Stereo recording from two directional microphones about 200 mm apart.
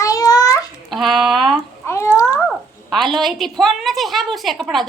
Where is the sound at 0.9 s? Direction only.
Centre (ahead or behind).